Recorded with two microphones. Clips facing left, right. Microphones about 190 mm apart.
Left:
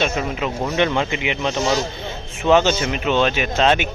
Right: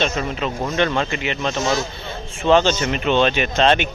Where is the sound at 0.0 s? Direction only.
10° left (ahead or behind).